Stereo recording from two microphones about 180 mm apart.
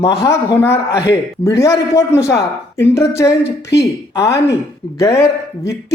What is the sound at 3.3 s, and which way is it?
Speech, 70° left (ahead or behind).